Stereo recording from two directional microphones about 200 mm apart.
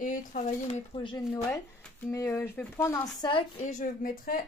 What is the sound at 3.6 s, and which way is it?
Speech, 40° left (ahead or behind).